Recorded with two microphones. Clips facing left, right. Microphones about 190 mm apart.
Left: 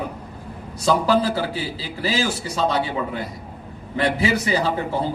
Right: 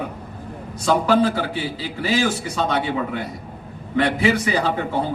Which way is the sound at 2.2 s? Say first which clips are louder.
Left 1 dB; 35° left (ahead or behind).